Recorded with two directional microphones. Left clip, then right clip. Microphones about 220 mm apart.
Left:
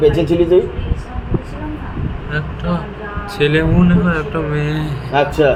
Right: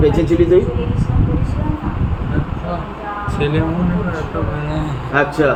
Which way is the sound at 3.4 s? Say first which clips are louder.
Left 6 dB; 15° left (ahead or behind).